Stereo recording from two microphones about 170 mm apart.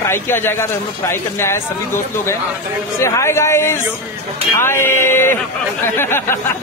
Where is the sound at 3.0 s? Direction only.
15° left (ahead or behind).